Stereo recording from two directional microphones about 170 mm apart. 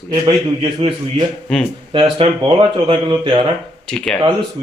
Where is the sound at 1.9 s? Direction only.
35° right (ahead or behind).